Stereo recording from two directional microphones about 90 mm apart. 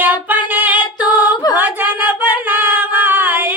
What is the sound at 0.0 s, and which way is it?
Female singing, 20° right (ahead or behind).